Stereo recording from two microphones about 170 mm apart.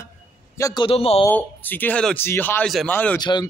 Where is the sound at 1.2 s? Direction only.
10° left (ahead or behind).